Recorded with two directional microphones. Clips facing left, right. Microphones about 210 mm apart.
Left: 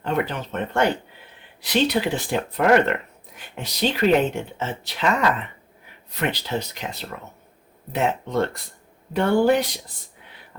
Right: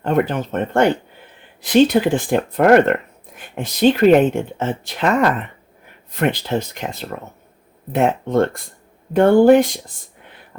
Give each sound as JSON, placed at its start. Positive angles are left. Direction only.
{"t": 0.0, "sound": "speech", "side_deg": -50}